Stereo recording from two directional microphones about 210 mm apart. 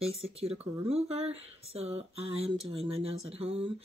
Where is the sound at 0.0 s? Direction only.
30° right (ahead or behind).